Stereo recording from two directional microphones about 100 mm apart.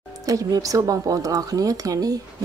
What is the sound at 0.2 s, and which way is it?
A woman's voice, 35° right (ahead or behind).